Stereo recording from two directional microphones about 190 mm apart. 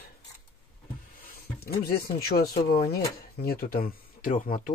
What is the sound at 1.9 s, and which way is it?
Speech, 55° left (ahead or behind).